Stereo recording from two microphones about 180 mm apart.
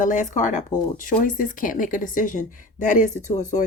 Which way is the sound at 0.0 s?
45° left (ahead or behind).